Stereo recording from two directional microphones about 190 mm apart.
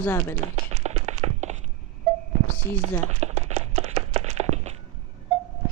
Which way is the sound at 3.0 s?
35° right (ahead or behind).